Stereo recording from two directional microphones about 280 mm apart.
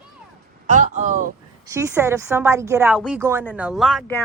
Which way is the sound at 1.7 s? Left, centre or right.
Centre.